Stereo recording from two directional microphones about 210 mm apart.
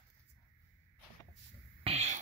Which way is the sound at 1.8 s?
30° right (ahead or behind).